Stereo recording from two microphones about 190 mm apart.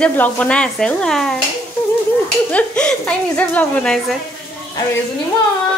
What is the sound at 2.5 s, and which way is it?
A woman's voice, 5° left (ahead or behind).